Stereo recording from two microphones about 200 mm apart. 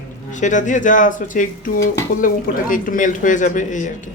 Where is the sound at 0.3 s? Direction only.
40° left (ahead or behind).